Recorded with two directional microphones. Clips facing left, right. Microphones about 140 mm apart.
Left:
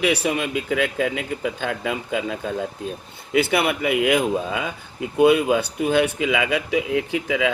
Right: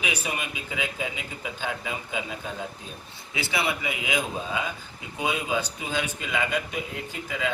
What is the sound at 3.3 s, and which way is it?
Speech, 55° left (ahead or behind).